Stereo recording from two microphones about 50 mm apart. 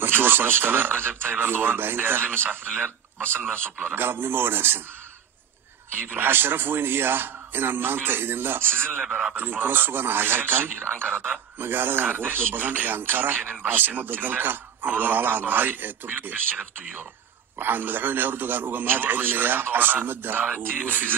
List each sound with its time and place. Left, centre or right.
0.0 s a man's voice: right
6.0 s a man's voice: right
9.0 s a man's voice: centre
9.3 s a man's voice: right